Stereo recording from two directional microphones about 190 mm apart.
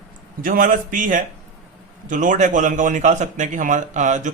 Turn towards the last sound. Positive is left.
turn(degrees=-40)  # may be behind; listen again after turning